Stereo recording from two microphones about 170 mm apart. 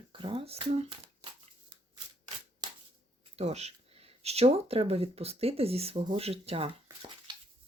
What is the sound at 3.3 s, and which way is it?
Speech, 40° right (ahead or behind).